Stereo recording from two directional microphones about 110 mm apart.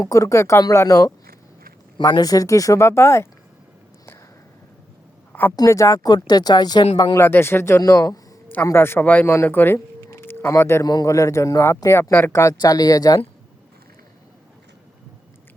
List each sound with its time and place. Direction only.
0.0 s speech: 30° left (ahead or behind)
5.3 s a sound: 20° left (ahead or behind)
5.5 s speech: 30° left (ahead or behind)
7.2 s speech: 20° left (ahead or behind)
7.8 s speech: 30° left (ahead or behind)
8.6 s speech: 20° left (ahead or behind)